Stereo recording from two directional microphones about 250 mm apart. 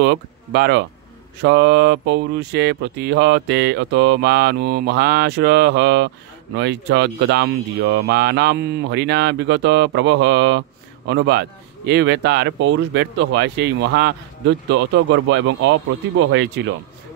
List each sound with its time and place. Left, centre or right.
0.0 s speech: right